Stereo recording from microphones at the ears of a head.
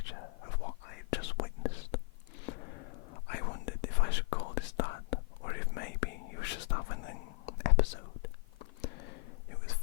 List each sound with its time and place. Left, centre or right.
0.0 s whispering: left